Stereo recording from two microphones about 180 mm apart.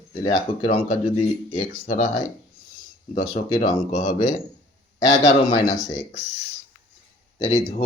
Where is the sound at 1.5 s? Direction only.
45° left (ahead or behind).